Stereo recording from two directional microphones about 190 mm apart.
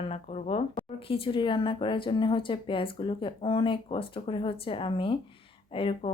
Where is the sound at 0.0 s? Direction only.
35° left (ahead or behind).